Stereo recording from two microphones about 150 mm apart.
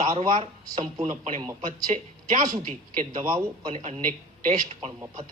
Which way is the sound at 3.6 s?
45° right (ahead or behind).